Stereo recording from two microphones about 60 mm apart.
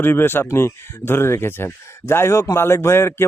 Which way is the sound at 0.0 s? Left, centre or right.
Left.